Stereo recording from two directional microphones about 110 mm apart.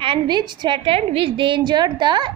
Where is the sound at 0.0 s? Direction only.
45° right (ahead or behind).